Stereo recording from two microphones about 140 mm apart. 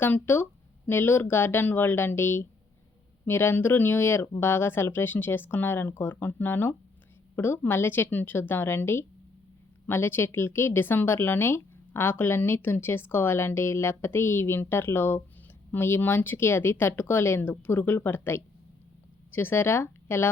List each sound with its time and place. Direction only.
0.0 s a woman's voice: 15° left (ahead or behind)